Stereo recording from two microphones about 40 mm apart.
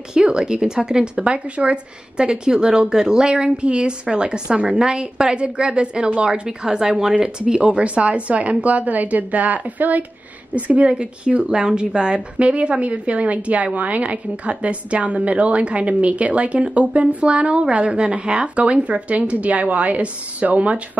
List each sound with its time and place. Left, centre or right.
0.1 s a woman's voice: centre; by 10.0 s right
10.5 s a woman's voice: right